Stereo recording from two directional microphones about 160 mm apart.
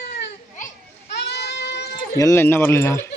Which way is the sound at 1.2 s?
90° left.